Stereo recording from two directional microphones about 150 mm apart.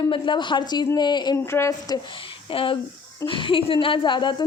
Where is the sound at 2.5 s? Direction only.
35° left (ahead or behind).